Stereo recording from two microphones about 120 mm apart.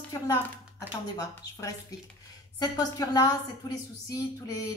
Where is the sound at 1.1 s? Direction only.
30° left (ahead or behind).